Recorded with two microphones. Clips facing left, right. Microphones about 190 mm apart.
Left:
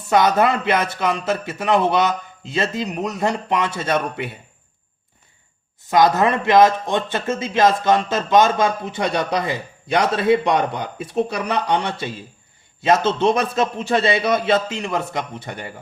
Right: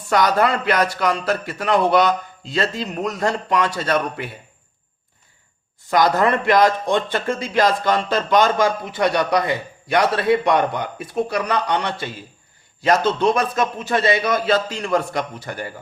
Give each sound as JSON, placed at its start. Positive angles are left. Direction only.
{"t": 0.1, "sound": "speech", "side_deg": 20}
{"t": 5.9, "sound": "speech", "side_deg": 20}